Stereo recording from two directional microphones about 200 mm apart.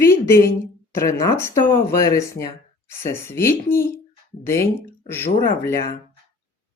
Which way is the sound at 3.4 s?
45° left (ahead or behind).